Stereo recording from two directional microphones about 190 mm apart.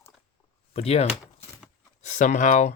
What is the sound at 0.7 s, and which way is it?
Speech, 35° left (ahead or behind).